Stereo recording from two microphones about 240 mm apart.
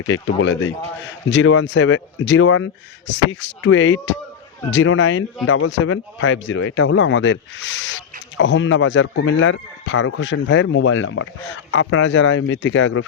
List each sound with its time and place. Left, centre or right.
0.0 s speech: left